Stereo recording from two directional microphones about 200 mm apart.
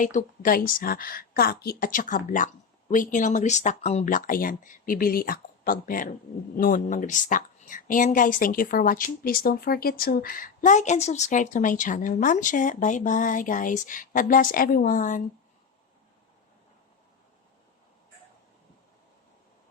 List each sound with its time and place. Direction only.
0.0 s a woman's voice: 40° left (ahead or behind)